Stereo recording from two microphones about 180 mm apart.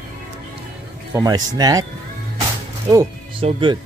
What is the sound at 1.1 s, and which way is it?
Speech, 20° right (ahead or behind).